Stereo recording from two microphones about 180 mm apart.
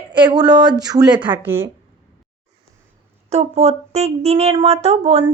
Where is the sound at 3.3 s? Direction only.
35° right (ahead or behind).